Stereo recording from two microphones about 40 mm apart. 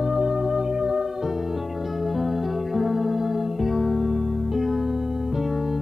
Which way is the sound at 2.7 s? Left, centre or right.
Centre.